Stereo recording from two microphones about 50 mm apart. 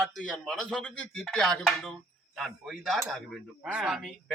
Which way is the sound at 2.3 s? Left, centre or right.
Centre.